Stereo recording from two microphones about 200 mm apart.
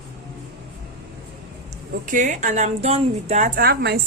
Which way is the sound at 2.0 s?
40° right (ahead or behind).